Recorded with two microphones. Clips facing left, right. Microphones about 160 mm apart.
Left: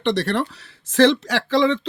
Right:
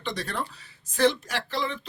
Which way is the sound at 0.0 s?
70° left (ahead or behind).